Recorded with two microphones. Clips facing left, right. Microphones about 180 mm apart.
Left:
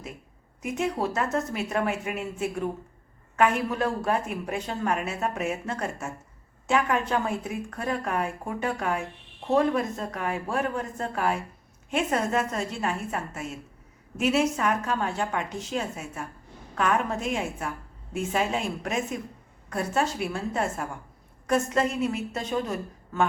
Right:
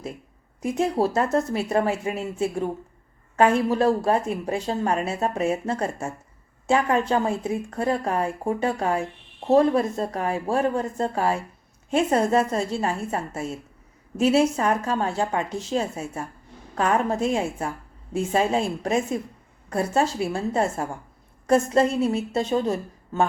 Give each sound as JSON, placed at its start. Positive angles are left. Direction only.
{"t": 0.6, "sound": "a woman's voice", "side_deg": -30}